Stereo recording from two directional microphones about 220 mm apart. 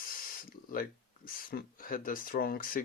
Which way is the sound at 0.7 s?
40° left (ahead or behind).